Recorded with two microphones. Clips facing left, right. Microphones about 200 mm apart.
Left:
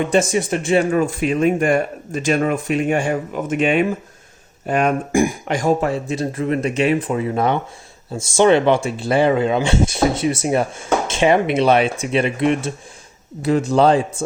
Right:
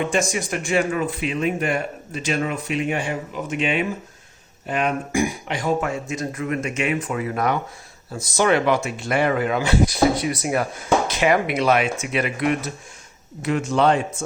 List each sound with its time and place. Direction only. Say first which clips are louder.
0.1 s speech: left 6 dB; 30° left (ahead or behind)
0.9 s speech: left 6 dB; 45° left (ahead or behind)